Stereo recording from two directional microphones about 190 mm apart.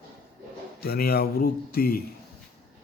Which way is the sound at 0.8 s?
55° left (ahead or behind).